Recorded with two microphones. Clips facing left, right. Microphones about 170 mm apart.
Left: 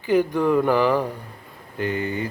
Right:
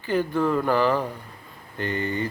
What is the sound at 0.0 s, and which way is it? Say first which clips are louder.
Mantra: left 4 dB; 15° left (ahead or behind).